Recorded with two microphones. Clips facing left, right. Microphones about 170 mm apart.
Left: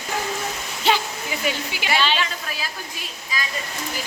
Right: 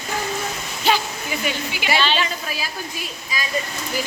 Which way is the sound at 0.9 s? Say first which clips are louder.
Right 1 dB; 25° left (ahead or behind).